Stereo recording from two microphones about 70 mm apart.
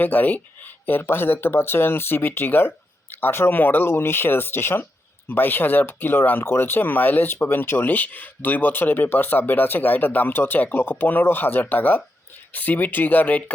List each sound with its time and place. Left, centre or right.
0.0 s speech: left